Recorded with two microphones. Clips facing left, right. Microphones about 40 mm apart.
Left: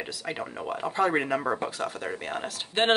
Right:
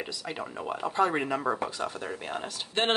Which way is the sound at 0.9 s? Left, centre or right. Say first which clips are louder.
Left 2 dB; centre.